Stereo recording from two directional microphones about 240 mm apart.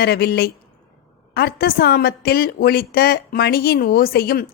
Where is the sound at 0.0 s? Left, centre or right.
Left.